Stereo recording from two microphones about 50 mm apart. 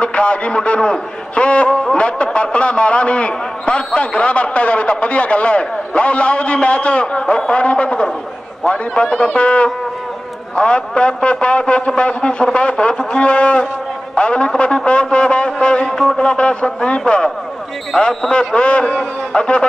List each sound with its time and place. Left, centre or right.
0.0 s a man's voice: left